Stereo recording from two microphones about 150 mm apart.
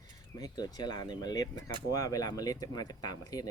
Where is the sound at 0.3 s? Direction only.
25° left (ahead or behind).